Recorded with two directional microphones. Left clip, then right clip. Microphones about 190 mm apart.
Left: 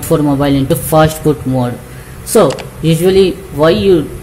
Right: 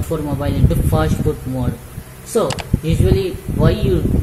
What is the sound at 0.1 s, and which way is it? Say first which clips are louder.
Speech: left 11 dB; 25° left (ahead or behind).